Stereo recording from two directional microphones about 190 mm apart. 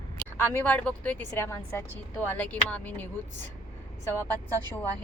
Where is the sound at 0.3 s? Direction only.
10° left (ahead or behind).